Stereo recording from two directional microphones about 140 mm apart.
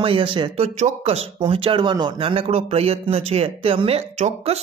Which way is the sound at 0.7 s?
50° right (ahead or behind).